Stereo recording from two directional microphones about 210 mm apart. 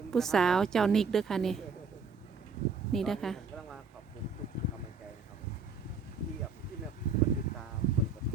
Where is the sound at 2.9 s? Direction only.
Centre (ahead or behind).